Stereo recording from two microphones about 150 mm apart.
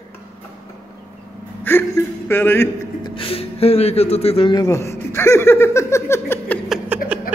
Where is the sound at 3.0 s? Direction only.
35° left (ahead or behind).